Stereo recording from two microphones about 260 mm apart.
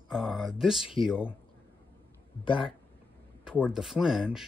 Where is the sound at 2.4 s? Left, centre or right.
Centre.